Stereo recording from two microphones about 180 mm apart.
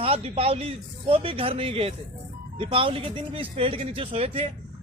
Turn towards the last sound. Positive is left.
turn(degrees=-35)  # may be behind; listen again after turning